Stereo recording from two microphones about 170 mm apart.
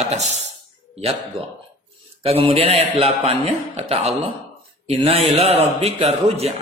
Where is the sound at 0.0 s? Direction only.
40° right (ahead or behind).